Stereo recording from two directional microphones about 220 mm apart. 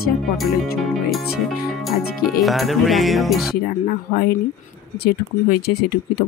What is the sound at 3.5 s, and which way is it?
Speech, 45° left (ahead or behind).